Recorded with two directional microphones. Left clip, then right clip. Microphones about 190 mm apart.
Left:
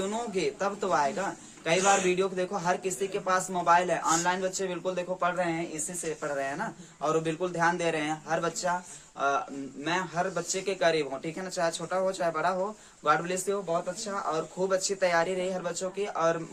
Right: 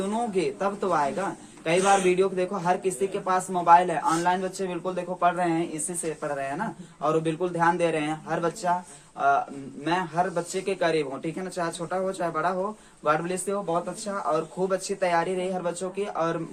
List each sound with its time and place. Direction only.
0.0 s speech: 20° left (ahead or behind)